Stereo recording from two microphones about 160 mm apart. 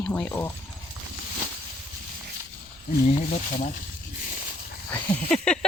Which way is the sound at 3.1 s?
45° left (ahead or behind).